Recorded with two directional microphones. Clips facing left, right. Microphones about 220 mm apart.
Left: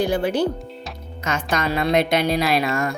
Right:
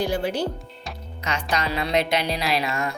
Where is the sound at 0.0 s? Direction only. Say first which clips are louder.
Left 4 dB; 55° left (ahead or behind).